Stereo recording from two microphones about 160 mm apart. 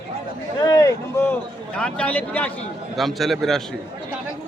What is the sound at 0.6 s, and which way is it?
A man's voice, 20° left (ahead or behind).